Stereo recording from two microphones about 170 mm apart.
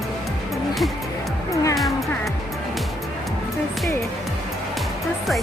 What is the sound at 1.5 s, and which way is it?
Music, 20° left (ahead or behind).